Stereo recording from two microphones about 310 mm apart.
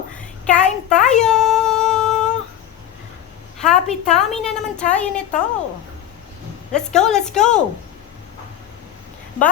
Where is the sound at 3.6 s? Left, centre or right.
Centre.